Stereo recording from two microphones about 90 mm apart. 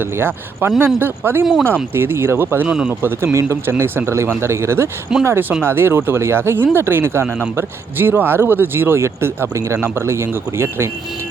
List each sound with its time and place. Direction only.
0.0 s speech: 25° right (ahead or behind)
2.6 s speech: 10° right (ahead or behind)
3.0 s speech: 25° right (ahead or behind)